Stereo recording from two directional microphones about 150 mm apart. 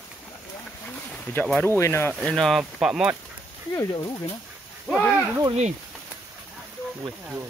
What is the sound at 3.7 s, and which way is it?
Speech, 25° left (ahead or behind).